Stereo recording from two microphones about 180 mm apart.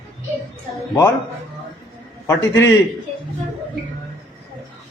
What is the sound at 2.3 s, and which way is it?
Speech, 15° left (ahead or behind).